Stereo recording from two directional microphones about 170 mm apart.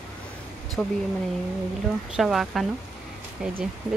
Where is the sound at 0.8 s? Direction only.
5° left (ahead or behind).